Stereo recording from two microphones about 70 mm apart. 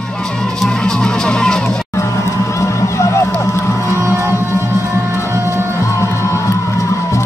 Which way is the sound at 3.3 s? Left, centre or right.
Left.